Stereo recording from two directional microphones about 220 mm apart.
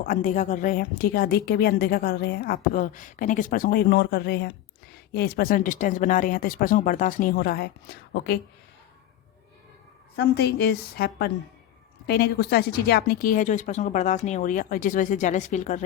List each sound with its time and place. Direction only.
0.0 s a woman's voice: 40° left (ahead or behind)
10.2 s a woman's voice: 50° left (ahead or behind); by 15.8 s 35° left (ahead or behind)